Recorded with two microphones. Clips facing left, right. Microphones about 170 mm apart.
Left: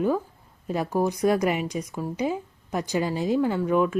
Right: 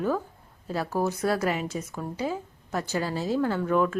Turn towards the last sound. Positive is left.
turn(degrees=10)  # may be behind; listen again after turning